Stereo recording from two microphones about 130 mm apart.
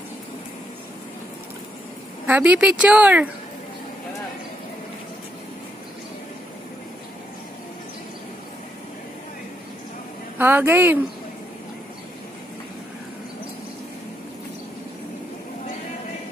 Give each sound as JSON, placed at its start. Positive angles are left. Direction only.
{"t": 2.2, "sound": "speech", "side_deg": -10}
{"t": 10.3, "sound": "speech", "side_deg": -15}